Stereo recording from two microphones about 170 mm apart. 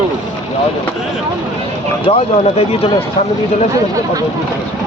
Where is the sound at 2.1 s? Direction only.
35° left (ahead or behind).